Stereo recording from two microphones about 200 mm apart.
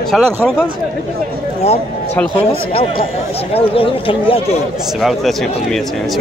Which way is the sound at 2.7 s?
30° left (ahead or behind).